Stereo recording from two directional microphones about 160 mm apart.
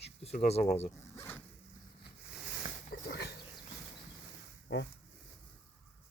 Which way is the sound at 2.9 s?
85° left.